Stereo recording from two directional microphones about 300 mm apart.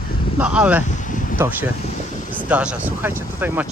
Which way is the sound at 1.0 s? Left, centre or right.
Left.